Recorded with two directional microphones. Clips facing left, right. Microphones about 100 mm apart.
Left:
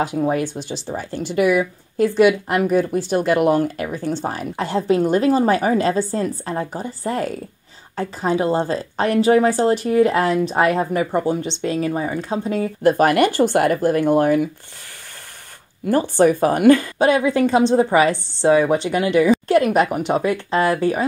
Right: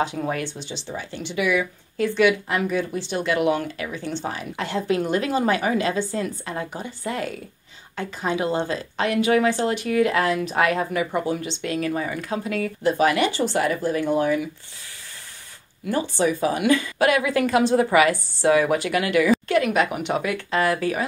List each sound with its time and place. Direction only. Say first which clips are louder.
0.2 s a woman's voice: left 7 dB; 25° left (ahead or behind)
0.8 s a woman's voice: left 5 dB; 40° left (ahead or behind)
12.8 s speech: left 5 dB; 50° left (ahead or behind)
15.9 s speech: left 7 dB; 50° left (ahead or behind)
17.0 s a woman's voice: left 4 dB; 30° left (ahead or behind)
19.4 s a woman's voice: left 5 dB; 40° left (ahead or behind)